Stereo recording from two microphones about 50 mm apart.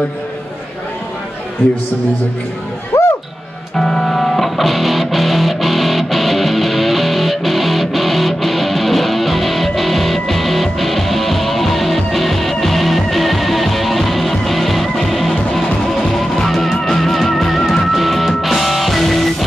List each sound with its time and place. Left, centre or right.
2.9 s music: left
3.7 s music: centre